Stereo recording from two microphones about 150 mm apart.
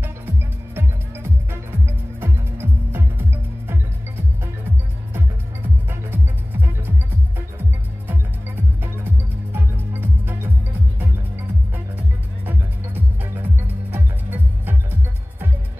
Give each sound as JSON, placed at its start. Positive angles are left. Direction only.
{"t": 0.7, "sound": "music", "side_deg": -15}
{"t": 5.9, "sound": "music", "side_deg": -15}
{"t": 8.8, "sound": "music", "side_deg": -15}
{"t": 12.4, "sound": "music", "side_deg": -10}